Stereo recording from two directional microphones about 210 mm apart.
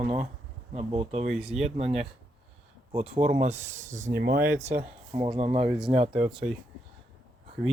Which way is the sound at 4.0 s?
45° right (ahead or behind).